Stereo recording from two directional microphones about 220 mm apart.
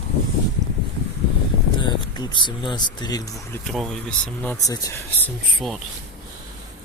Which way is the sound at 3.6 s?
Centre (ahead or behind).